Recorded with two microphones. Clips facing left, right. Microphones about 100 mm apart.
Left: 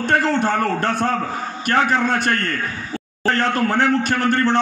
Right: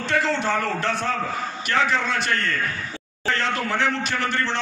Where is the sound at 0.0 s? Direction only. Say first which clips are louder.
Left 5 dB; 50° left (ahead or behind).